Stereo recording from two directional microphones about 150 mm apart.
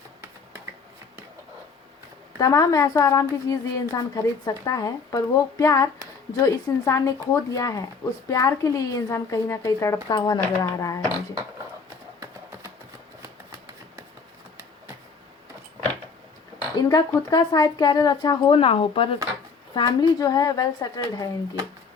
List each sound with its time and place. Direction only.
2.4 s a woman's voice: 25° left (ahead or behind)
16.7 s a woman's voice: 25° left (ahead or behind)